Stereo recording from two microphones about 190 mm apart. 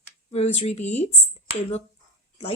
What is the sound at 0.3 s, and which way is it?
Speech, 35° left (ahead or behind).